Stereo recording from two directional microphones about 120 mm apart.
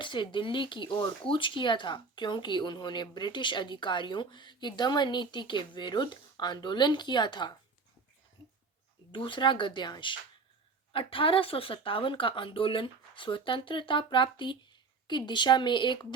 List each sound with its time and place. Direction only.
0.0 s a woman's voice: 45° left (ahead or behind)
9.1 s speech: 40° left (ahead or behind)